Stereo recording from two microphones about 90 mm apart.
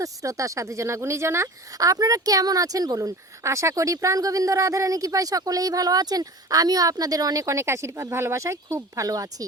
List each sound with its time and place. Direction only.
0.0 s speech: 35° right (ahead or behind)